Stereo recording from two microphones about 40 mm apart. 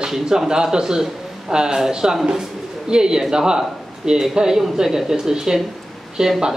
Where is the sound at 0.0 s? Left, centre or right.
Centre.